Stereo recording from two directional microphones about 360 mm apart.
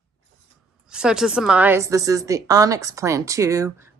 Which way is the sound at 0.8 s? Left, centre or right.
Centre.